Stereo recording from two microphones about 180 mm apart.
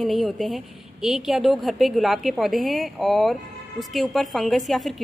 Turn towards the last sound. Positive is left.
turn(degrees=0)  # may be behind; listen again after turning